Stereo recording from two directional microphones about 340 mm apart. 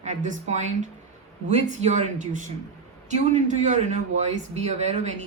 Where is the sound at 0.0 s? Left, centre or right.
Right.